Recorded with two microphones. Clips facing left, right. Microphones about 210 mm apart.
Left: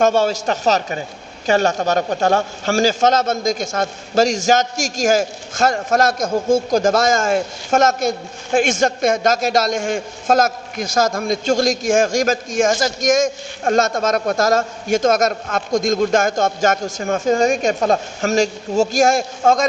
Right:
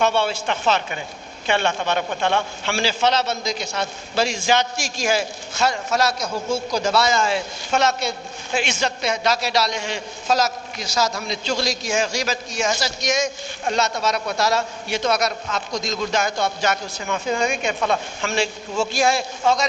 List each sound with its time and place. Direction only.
0.0 s a woman's voice: 45° left (ahead or behind)